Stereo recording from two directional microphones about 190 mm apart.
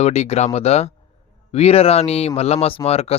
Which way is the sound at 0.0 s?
35° left (ahead or behind).